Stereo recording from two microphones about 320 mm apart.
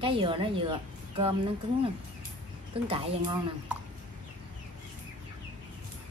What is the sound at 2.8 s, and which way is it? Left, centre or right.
Speech, centre.